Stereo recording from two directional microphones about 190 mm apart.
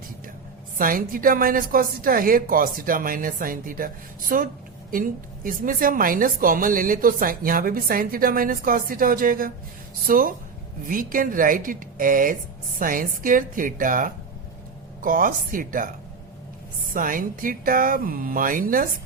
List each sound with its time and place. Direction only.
0.8 s a woman's voice: 45° right (ahead or behind)
16.9 s a woman's voice: 45° right (ahead or behind)